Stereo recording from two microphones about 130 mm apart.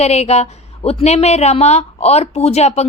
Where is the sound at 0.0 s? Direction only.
55° left (ahead or behind).